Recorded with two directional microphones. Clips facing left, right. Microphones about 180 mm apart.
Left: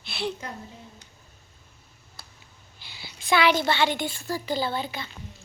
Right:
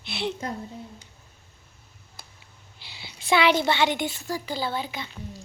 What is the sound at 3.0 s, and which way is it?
A child's voice, 25° right (ahead or behind).